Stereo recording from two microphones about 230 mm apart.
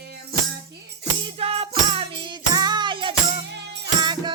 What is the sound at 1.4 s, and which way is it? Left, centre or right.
Music, right.